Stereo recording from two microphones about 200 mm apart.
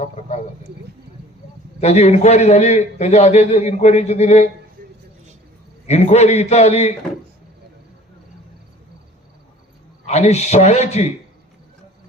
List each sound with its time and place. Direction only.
1.8 s a man's voice: 35° left (ahead or behind)
4.8 s a sound: 45° right (ahead or behind)
5.8 s a man's voice: 35° left (ahead or behind)
10.1 s a man's voice: 35° left (ahead or behind)